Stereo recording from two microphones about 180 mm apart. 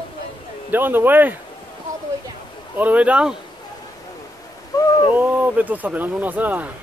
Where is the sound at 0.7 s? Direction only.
10° right (ahead or behind).